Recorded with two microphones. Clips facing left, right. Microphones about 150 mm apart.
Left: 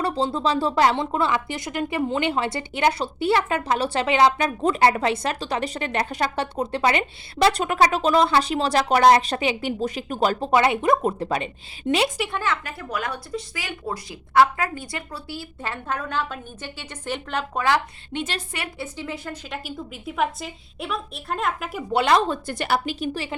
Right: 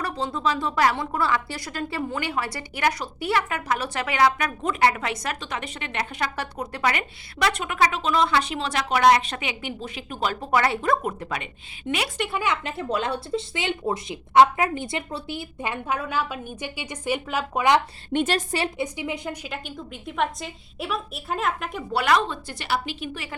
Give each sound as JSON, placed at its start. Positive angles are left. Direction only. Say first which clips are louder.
{"t": 0.0, "sound": "a woman's voice", "louder": "left 4 dB", "side_deg": 30}
{"t": 10.4, "sound": "a woman's voice", "louder": "left 2 dB", "side_deg": 20}
{"t": 11.2, "sound": "speech", "louder": "left 6 dB", "side_deg": 30}
{"t": 12.1, "sound": "a woman's voice", "louder": "even", "side_deg": 0}
{"t": 12.4, "sound": "speech", "louder": "right 1 dB", "side_deg": -20}
{"t": 18.1, "sound": "a woman's voice", "louder": "right 6 dB", "side_deg": -50}
{"t": 18.8, "sound": "speech", "louder": "right 3 dB", "side_deg": -15}
{"t": 19.5, "sound": "a woman's voice", "louder": "left 2 dB", "side_deg": 0}
{"t": 21.9, "sound": "a woman's voice", "louder": "left 3 dB", "side_deg": 25}
{"t": 22.3, "sound": "a woman's voice", "louder": "left 4 dB", "side_deg": 50}